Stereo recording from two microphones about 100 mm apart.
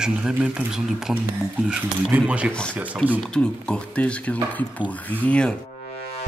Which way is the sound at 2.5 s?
10° left (ahead or behind).